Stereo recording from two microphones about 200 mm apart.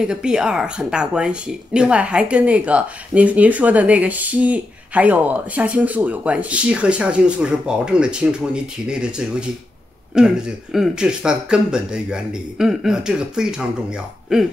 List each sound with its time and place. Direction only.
0.0 s speech: 5° right (ahead or behind)